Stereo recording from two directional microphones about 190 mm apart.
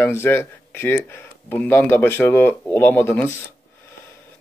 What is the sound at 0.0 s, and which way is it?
Speech, 10° left (ahead or behind).